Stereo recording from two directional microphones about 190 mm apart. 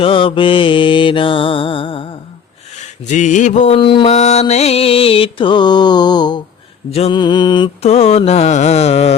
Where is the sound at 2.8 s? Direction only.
40° left (ahead or behind).